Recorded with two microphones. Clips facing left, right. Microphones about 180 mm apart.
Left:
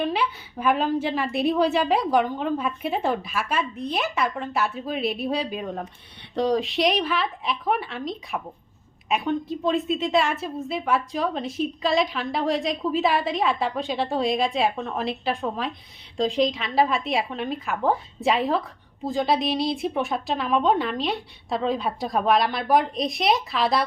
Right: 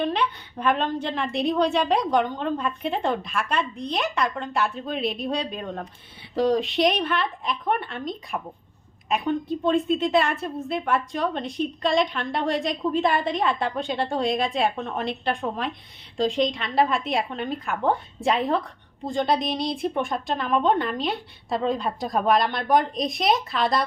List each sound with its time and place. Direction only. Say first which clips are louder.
0.0 s a woman's voice: even; 5° left (ahead or behind)